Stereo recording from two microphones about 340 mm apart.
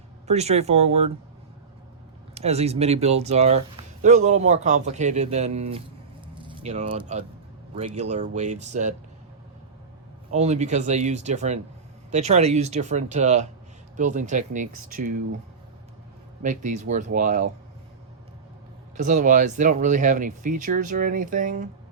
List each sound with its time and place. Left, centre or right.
0.3 s speech: centre
2.3 s speech: centre
6.2 s squish: centre
7.8 s speech: centre
10.3 s speech: centre
16.4 s speech: right
18.9 s speech: right